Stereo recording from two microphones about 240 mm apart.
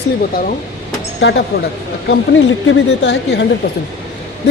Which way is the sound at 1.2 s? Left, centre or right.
Left.